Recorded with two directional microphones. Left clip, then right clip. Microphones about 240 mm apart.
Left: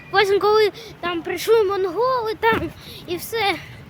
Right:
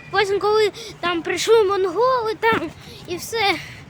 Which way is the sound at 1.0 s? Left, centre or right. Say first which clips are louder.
Right 3 dB; centre.